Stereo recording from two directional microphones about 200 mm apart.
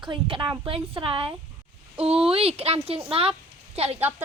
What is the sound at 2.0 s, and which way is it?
Speech, 5° right (ahead or behind).